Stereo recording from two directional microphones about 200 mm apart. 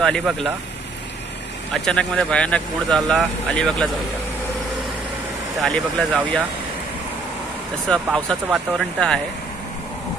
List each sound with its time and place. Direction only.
0.0 s speech: centre (ahead or behind)
1.7 s speech: 5° left (ahead or behind)
5.6 s speech: centre (ahead or behind)
7.9 s speech: centre (ahead or behind)